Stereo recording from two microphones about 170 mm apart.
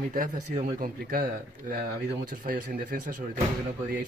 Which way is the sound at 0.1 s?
55° right (ahead or behind).